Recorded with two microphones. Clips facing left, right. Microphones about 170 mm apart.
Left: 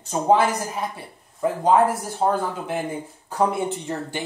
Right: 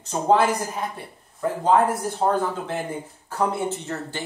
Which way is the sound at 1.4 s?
15° left (ahead or behind).